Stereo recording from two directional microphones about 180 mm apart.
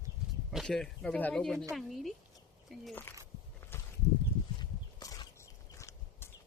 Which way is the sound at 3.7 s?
15° left (ahead or behind).